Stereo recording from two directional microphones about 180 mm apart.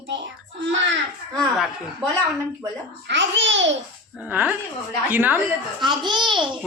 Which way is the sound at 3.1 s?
90° right.